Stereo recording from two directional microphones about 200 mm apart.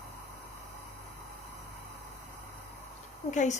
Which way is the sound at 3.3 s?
35° left (ahead or behind).